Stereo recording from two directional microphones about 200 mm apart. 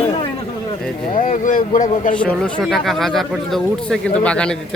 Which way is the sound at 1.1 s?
40° left (ahead or behind).